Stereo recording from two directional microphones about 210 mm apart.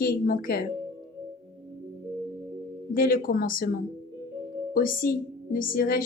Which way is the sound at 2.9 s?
40° left (ahead or behind).